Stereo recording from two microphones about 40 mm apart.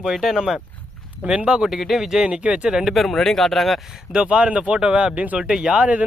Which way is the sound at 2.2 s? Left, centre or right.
Right.